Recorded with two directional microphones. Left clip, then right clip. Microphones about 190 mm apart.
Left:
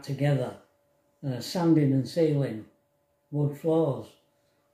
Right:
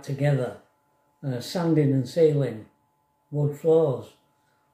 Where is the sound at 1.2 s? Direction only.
15° right (ahead or behind).